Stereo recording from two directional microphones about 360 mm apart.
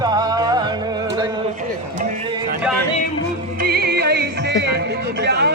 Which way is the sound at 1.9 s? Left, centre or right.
Centre.